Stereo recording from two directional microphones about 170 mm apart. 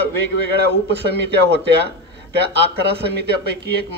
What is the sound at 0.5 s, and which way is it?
A man's voice, 80° right.